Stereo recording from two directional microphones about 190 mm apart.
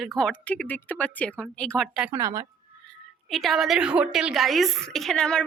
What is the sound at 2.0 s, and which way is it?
Speech, 15° right (ahead or behind).